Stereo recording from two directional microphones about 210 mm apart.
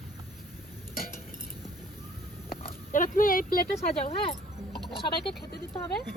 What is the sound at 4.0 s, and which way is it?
Speech, 30° left (ahead or behind).